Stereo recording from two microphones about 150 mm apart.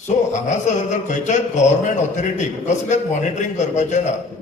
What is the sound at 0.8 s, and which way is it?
A man's voice, 55° left (ahead or behind).